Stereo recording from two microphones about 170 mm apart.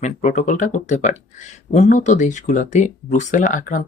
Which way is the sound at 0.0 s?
45° left (ahead or behind).